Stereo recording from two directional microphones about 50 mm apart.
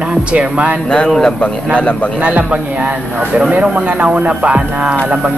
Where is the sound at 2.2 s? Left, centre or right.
Right.